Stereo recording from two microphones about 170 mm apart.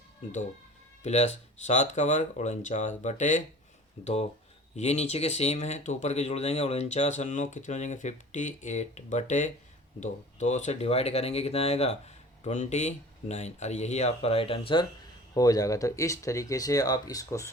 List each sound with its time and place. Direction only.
1.0 s speech: 40° left (ahead or behind)
15.4 s speech: 20° left (ahead or behind)